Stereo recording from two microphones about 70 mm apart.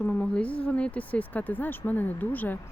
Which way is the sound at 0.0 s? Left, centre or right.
Left.